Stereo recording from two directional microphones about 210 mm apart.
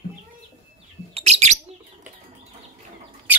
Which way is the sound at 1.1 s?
30° right (ahead or behind).